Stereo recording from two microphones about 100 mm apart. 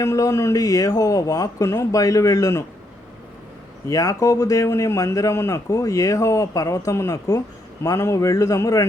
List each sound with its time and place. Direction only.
0.0 s a man's voice: 30° left (ahead or behind)
3.8 s a man's voice: 30° left (ahead or behind)